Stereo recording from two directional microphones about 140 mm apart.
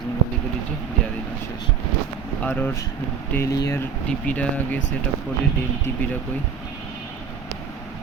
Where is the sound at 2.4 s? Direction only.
15° left (ahead or behind).